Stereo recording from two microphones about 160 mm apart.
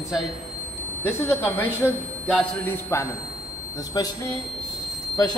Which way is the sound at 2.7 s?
15° left (ahead or behind).